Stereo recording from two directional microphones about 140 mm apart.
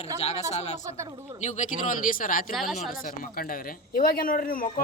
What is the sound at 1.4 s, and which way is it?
Speech, 65° left (ahead or behind).